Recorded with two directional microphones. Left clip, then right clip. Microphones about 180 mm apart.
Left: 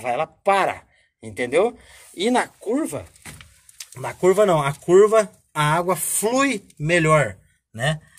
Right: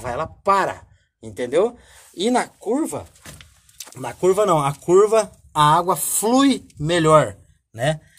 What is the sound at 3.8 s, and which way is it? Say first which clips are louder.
Speech: even; 20° right (ahead or behind).